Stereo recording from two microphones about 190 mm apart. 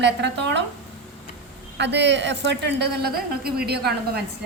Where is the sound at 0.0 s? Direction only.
65° right (ahead or behind).